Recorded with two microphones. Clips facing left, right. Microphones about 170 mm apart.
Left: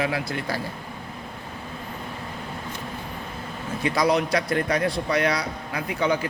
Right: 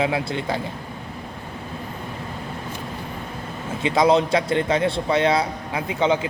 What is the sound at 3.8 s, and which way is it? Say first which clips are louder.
Speech: right 4 dB; 25° right (ahead or behind).